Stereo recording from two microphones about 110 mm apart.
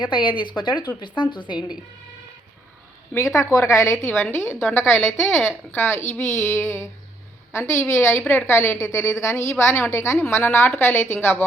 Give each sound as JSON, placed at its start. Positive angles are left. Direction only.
{"t": 0.0, "sound": "speech", "side_deg": 45}
{"t": 3.2, "sound": "a woman's voice", "side_deg": 30}